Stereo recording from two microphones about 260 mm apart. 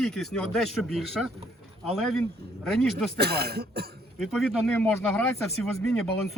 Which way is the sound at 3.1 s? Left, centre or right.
Right.